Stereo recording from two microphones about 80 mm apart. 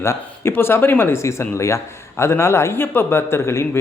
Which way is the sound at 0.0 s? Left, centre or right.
Left.